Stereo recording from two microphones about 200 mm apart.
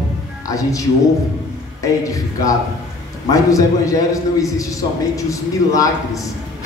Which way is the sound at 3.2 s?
15° left (ahead or behind).